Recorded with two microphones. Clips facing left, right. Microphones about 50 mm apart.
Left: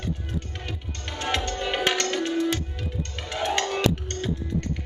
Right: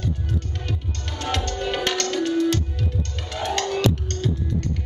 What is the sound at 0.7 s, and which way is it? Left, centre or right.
Music, centre.